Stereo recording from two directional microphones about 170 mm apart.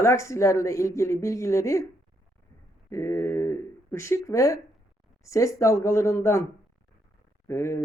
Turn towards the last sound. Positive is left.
turn(degrees=15)  # may be behind; listen again after turning